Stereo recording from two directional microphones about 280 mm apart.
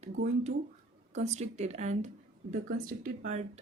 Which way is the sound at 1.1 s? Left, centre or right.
Right.